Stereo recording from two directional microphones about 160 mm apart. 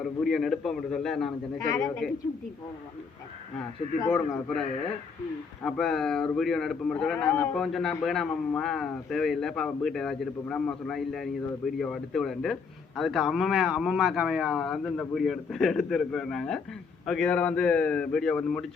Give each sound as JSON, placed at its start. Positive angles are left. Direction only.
{"t": 0.0, "sound": "a man's voice", "side_deg": 0}
{"t": 1.5, "sound": "a man's voice", "side_deg": 20}
{"t": 4.1, "sound": "a man's voice", "side_deg": 5}
{"t": 5.6, "sound": "a man's voice", "side_deg": 5}